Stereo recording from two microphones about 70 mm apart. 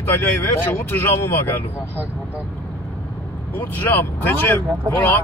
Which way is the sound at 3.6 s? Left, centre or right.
Left.